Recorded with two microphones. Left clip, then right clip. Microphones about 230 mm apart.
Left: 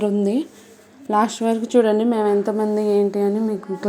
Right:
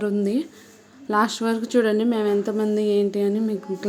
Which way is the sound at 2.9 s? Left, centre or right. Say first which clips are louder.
Left 3 dB; centre.